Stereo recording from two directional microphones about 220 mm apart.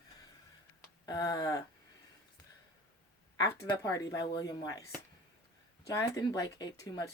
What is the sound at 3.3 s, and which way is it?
Female singing, 15° left (ahead or behind).